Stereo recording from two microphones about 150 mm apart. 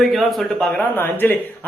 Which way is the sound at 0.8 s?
15° left (ahead or behind).